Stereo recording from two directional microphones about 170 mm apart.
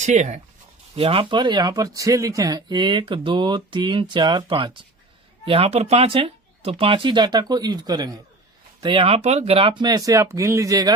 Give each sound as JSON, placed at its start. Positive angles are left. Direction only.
{"t": 0.0, "sound": "speech", "side_deg": -45}
{"t": 0.9, "sound": "speech", "side_deg": -35}